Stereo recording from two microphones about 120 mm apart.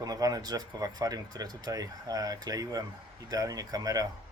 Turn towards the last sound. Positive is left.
turn(degrees=-30)  # may be behind; listen again after turning